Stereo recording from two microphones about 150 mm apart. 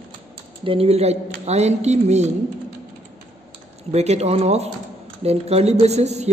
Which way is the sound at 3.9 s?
45° right (ahead or behind).